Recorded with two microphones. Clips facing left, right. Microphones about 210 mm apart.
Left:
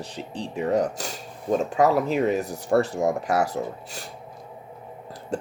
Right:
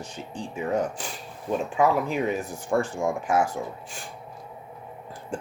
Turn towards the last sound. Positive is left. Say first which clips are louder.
# left 4 dB
turn(degrees=40)  # may be behind; listen again after turning